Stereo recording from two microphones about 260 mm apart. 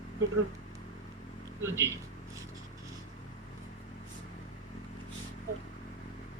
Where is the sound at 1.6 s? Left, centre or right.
Centre.